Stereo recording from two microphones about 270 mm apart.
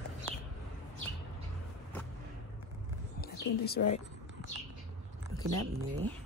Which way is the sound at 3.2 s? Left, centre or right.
Left.